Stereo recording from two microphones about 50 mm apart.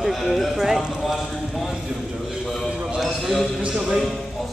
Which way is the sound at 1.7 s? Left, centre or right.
Centre.